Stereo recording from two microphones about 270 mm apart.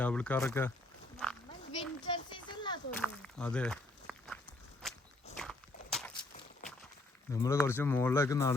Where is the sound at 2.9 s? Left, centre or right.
Centre.